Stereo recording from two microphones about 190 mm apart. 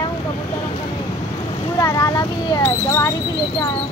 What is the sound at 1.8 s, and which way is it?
Speech, 15° left (ahead or behind).